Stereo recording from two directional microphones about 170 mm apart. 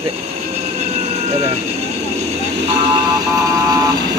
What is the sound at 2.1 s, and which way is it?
Vehicle, 40° right (ahead or behind).